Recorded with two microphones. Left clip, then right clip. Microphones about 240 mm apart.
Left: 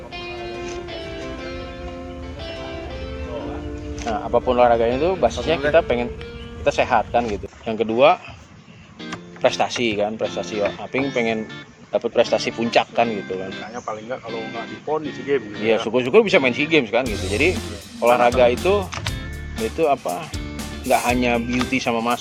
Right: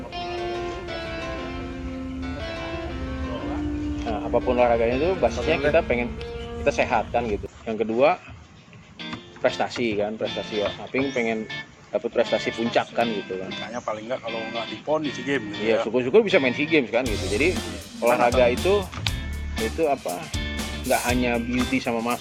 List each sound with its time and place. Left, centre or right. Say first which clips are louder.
4.0 s speech: left 5 dB; left
9.4 s speech: left 5 dB; left
13.7 s speech: right 1 dB; right
15.6 s speech: left 2 dB; left
17.5 s speech: left 2 dB; centre
18.4 s speech: left 3 dB; left
19.8 s speech: left 5 dB; left
20.6 s music: left 5 dB; centre
21.2 s speech: left 4 dB; left